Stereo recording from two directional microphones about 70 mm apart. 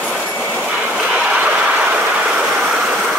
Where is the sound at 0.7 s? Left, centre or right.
Centre.